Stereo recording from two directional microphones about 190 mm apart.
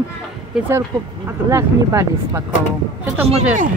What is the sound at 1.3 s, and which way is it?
Speech, 15° right (ahead or behind).